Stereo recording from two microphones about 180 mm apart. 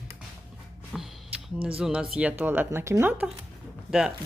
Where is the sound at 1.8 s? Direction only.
5° right (ahead or behind).